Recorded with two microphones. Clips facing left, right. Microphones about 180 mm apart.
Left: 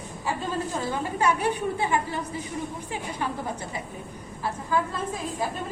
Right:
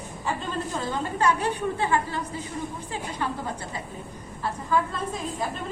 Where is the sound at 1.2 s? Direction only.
10° left (ahead or behind).